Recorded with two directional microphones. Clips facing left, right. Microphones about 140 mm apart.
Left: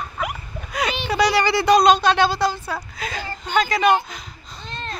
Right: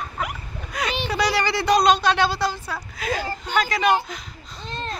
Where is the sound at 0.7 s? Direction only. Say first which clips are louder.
Left 3 dB; 5° left (ahead or behind).